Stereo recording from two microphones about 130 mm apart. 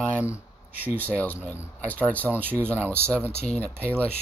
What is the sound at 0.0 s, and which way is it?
Speech, 15° left (ahead or behind).